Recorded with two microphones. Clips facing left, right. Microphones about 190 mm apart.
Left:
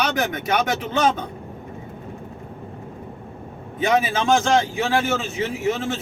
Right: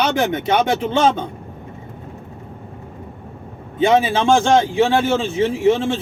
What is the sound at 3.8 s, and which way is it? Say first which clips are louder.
A man's voice: right 5 dB; 25° right (ahead or behind).